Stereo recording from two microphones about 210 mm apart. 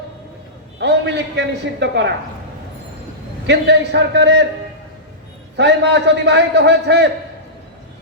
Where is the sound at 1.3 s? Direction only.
55° right (ahead or behind).